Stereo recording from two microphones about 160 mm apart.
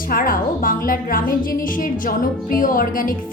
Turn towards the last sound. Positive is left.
turn(degrees=60)  # may be behind; listen again after turning